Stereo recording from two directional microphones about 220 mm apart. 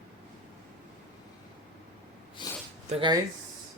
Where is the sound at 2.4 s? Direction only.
20° left (ahead or behind).